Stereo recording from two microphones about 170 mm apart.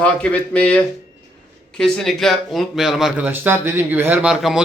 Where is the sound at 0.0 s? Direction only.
5° left (ahead or behind).